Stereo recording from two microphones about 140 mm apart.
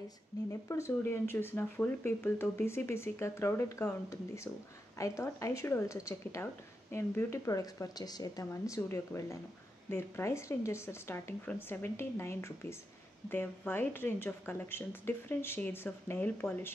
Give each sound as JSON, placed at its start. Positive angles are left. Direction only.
{"t": 0.5, "sound": "speech", "side_deg": 20}